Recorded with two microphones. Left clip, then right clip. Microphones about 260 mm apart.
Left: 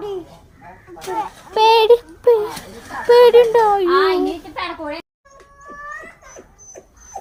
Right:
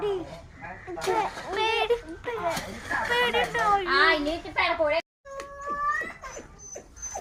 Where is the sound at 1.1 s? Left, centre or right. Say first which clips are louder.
Left 12 dB; left.